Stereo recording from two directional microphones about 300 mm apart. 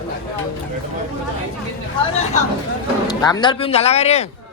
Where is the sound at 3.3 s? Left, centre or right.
Centre.